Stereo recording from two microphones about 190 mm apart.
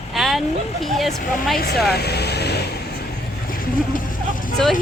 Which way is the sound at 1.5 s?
55° left (ahead or behind).